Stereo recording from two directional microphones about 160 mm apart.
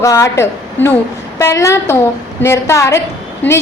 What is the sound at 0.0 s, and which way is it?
A woman's voice, 20° left (ahead or behind).